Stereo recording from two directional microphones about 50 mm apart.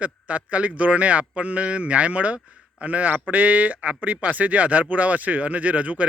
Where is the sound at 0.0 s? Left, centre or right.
Right.